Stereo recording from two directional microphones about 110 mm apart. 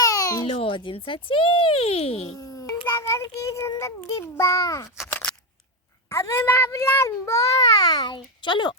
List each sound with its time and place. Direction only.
0.0 s babbling: 30° left (ahead or behind)
0.4 s speech: 60° left (ahead or behind)
2.8 s speech: 25° left (ahead or behind)
5.0 s a sound: 15° left (ahead or behind)
6.1 s speech: 25° left (ahead or behind); by 8.7 s 45° left (ahead or behind)